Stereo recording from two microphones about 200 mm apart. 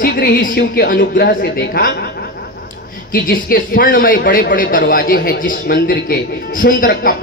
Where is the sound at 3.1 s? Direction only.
45° left (ahead or behind).